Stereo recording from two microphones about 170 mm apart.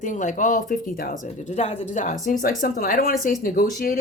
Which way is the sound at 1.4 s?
40° left (ahead or behind).